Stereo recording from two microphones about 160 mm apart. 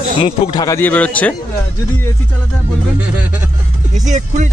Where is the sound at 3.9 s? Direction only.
50° right (ahead or behind).